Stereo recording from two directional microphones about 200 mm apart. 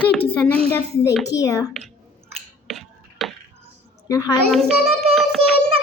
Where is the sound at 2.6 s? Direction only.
Centre (ahead or behind).